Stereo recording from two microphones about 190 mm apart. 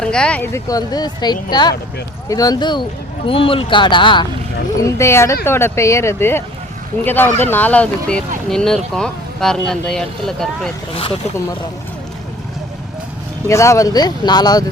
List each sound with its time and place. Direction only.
0.0 s speech: 5° left (ahead or behind); by 4.3 s 25° left (ahead or behind)
4.9 s speech: 15° left (ahead or behind)
13.5 s speech: 15° left (ahead or behind)